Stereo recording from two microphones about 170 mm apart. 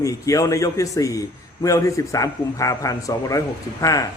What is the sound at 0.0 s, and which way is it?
A man's voice, 20° left (ahead or behind).